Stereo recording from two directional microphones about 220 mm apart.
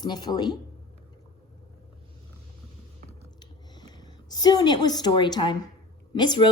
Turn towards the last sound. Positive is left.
turn(degrees=20)  # may be behind; listen again after turning